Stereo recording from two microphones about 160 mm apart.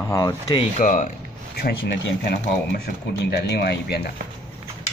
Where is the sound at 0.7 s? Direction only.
50° left (ahead or behind).